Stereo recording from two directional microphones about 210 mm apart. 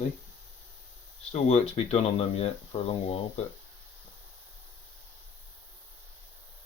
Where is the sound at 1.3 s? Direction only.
30° left (ahead or behind).